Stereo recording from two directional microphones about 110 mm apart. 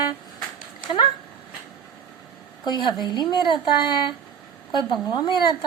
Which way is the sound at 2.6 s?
40° left (ahead or behind).